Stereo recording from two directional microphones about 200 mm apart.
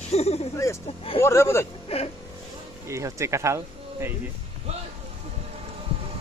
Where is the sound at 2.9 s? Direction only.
15° right (ahead or behind).